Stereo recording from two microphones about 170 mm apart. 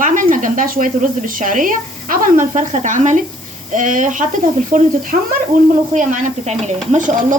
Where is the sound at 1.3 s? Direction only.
50° right (ahead or behind).